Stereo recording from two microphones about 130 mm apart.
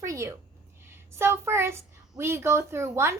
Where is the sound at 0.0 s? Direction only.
20° right (ahead or behind).